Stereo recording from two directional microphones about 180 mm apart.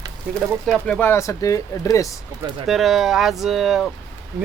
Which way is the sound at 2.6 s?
Centre (ahead or behind).